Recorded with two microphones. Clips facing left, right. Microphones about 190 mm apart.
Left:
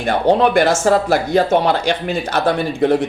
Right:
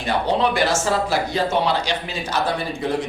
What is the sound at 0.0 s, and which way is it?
Speech, 55° left (ahead or behind).